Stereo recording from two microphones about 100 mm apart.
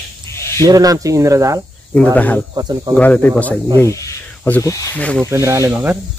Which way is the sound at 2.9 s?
15° left (ahead or behind).